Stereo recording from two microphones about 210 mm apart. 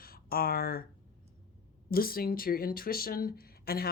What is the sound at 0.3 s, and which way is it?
Speech, 45° left (ahead or behind).